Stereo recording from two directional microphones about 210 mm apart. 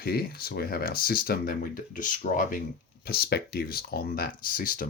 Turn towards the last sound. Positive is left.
turn(degrees=40)  # may be behind; listen again after turning